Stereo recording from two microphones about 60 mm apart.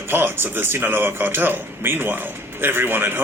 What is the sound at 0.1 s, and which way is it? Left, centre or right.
A man's voice, right.